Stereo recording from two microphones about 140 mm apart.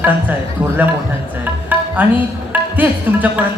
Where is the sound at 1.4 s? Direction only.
10° right (ahead or behind).